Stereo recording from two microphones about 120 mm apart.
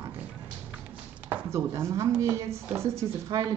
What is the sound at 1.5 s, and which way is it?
Speech, 20° right (ahead or behind).